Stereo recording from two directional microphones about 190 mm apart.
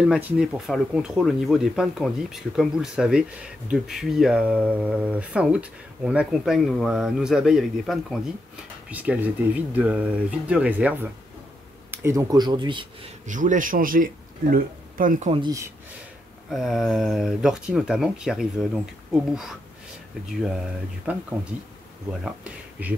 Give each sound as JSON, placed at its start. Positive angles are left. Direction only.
{"t": 0.0, "sound": "speech", "side_deg": -5}
{"t": 13.3, "sound": "a man's voice", "side_deg": -40}
{"t": 15.3, "sound": "speech", "side_deg": -20}
{"t": 16.4, "sound": "speech", "side_deg": 0}
{"t": 20.4, "sound": "speech", "side_deg": -5}
{"t": 22.2, "sound": "speech", "side_deg": -5}